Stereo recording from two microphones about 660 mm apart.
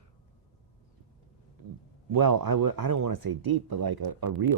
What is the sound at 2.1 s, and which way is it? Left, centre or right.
Speech, right.